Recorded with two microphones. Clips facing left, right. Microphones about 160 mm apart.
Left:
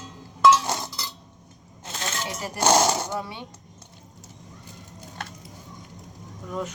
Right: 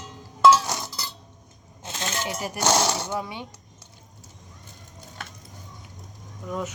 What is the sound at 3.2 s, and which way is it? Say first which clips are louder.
Speech: right 1 dB; 15° right (ahead or behind).